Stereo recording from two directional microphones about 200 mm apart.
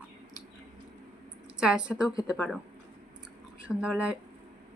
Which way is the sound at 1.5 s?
5° right (ahead or behind).